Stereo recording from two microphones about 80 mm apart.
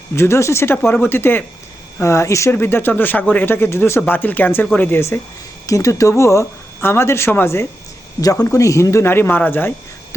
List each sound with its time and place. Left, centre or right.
0.2 s speech: left
2.5 s speech: left
5.6 s speech: left
8.2 s speech: left